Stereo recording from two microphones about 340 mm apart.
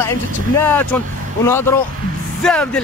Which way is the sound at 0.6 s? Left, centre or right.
Centre.